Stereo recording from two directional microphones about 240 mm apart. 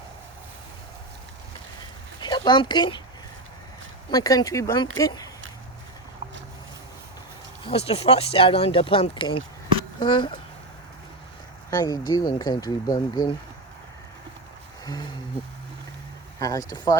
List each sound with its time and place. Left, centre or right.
2.2 s speech: centre
4.1 s speech: centre
7.6 s speech: left
11.7 s speech: centre
16.4 s speech: centre